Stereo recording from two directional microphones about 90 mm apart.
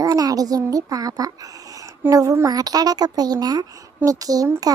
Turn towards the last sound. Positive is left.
turn(degrees=-40)  # may be behind; listen again after turning